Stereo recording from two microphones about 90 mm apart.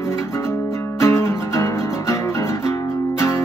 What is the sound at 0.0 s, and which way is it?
Music, 30° left (ahead or behind).